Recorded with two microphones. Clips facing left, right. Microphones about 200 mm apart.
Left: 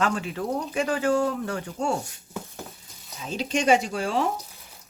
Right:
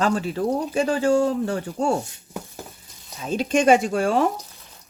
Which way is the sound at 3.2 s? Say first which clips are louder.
Right 6 dB; 50° right (ahead or behind).